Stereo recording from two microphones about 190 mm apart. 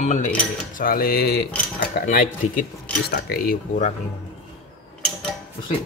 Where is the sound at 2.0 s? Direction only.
45° left (ahead or behind).